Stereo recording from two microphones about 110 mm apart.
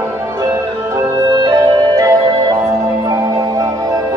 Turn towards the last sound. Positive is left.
turn(degrees=-35)  # may be behind; listen again after turning